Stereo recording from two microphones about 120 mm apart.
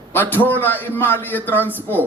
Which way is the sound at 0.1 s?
15° left (ahead or behind).